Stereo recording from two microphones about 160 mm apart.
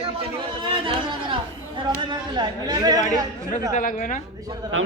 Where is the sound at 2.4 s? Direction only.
25° right (ahead or behind).